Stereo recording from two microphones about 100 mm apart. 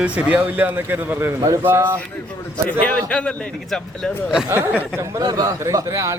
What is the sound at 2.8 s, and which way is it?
A man's voice, 15° left (ahead or behind).